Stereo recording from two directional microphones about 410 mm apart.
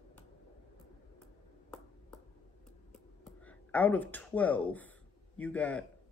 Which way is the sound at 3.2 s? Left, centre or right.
Centre.